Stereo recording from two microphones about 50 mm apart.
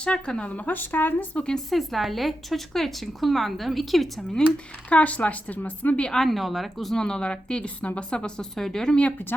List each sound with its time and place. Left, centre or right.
0.0 s a woman's voice: centre
1.7 s a woman's voice: centre
4.3 s speech: centre
4.9 s a woman's voice: left
6.1 s speech: centre
6.3 s a woman's voice: centre
7.0 s a woman's voice: centre